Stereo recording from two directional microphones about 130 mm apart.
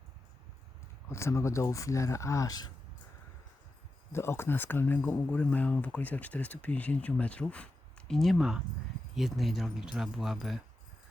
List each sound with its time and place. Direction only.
1.1 s speech: 20° left (ahead or behind)
4.1 s speech: 20° left (ahead or behind); by 10.6 s centre (ahead or behind)